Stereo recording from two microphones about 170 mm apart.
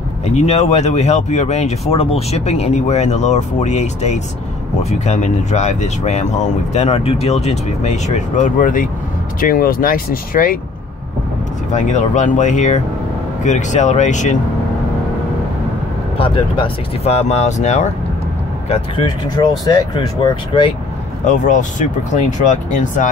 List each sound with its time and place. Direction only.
0.2 s speech: 40° left (ahead or behind)
11.7 s speech: 45° left (ahead or behind)
16.2 s speech: 30° left (ahead or behind)
18.7 s speech: 30° left (ahead or behind)
21.2 s speech: 45° left (ahead or behind)